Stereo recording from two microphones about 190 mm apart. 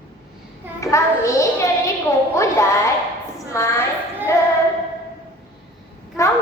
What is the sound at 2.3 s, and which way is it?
Music, 15° left (ahead or behind).